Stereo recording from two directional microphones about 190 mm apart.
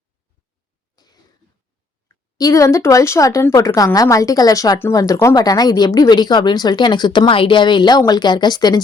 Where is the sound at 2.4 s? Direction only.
15° left (ahead or behind).